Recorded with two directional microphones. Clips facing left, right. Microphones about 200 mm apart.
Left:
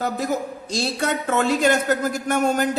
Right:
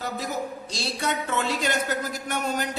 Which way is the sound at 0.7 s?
50° left (ahead or behind).